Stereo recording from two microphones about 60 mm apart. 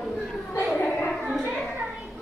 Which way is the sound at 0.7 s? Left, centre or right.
Left.